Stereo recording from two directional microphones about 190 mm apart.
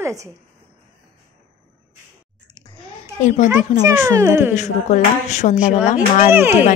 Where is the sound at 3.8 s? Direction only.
15° right (ahead or behind).